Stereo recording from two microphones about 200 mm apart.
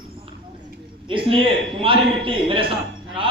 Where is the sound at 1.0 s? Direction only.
25° right (ahead or behind).